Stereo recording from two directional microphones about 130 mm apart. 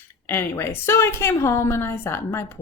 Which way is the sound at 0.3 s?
20° left (ahead or behind).